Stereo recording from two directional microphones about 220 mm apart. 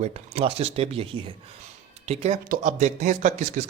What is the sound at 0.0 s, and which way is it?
Speech, 30° right (ahead or behind).